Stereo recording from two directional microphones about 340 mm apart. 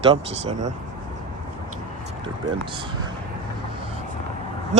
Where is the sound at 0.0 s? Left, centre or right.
Centre.